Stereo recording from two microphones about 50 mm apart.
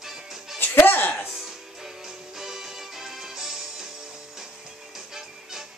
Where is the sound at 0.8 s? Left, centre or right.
Left.